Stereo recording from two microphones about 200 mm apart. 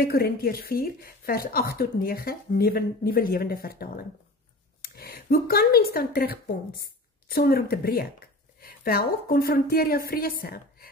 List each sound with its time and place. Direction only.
0.0 s a woman's voice: 50° left (ahead or behind)